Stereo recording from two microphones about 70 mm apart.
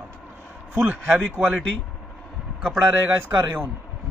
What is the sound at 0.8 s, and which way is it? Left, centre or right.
Speech, right.